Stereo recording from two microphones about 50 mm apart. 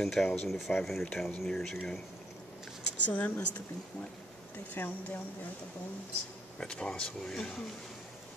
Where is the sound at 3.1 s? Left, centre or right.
Left.